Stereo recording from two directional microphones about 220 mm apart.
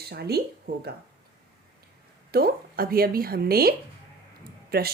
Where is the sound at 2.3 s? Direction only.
45° right (ahead or behind).